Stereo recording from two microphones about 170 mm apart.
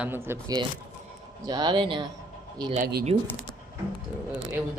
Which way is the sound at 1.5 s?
25° right (ahead or behind).